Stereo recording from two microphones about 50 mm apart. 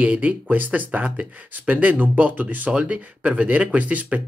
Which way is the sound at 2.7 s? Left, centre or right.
Right.